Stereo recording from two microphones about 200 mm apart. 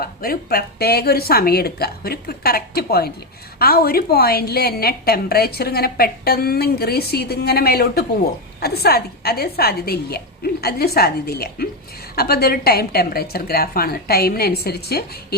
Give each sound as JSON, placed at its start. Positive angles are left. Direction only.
{"t": 0.0, "sound": "a woman's voice", "side_deg": 50}